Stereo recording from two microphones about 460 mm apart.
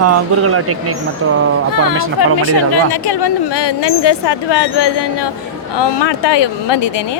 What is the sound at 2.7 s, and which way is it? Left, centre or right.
Speech, left.